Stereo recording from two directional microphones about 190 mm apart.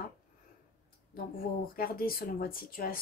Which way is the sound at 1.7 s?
50° left (ahead or behind).